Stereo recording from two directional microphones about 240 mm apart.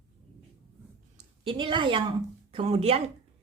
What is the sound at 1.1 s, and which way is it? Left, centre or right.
A woman's voice, right.